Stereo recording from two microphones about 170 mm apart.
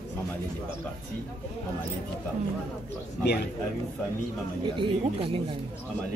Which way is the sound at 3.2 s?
70° left (ahead or behind).